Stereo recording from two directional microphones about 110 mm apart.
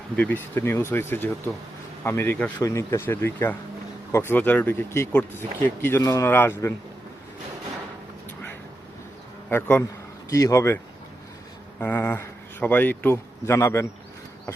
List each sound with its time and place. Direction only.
0.2 s speech: 15° left (ahead or behind)
2.6 s speech: 30° left (ahead or behind)
9.5 s speech: 20° left (ahead or behind)
10.2 s speech: 30° left (ahead or behind)
11.8 s speech: 20° left (ahead or behind)